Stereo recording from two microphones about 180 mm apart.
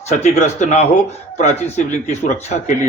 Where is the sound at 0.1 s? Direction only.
40° left (ahead or behind).